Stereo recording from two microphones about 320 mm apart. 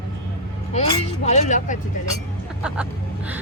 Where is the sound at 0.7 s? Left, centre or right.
Left.